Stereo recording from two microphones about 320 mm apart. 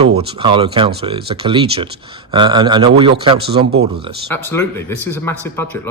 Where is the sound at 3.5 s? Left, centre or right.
Right.